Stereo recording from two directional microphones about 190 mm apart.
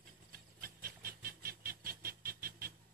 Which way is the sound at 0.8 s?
50° right (ahead or behind).